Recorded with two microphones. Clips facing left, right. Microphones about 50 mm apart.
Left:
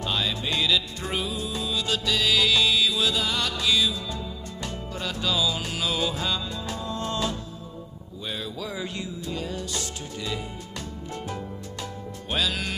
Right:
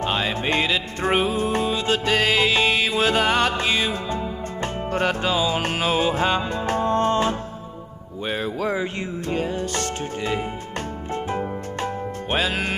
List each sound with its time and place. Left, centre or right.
0.0 s music: right
5.3 s music: right